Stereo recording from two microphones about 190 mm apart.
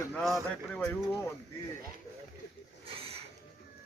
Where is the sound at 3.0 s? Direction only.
30° right (ahead or behind).